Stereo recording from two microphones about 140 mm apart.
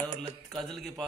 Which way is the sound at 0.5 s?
Centre (ahead or behind).